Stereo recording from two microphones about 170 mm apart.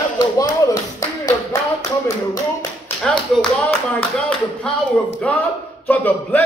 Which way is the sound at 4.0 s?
5° left (ahead or behind).